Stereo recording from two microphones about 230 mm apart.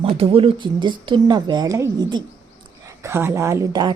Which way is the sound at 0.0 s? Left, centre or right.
Right.